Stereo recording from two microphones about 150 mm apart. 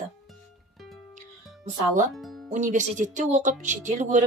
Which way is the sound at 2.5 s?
55° right (ahead or behind).